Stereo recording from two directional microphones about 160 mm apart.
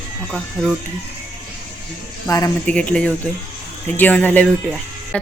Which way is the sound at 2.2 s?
20° left (ahead or behind).